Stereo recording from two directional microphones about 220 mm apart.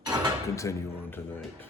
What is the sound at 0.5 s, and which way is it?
Speech, 15° left (ahead or behind).